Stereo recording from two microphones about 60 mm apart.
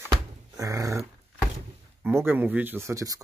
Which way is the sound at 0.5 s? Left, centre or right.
Right.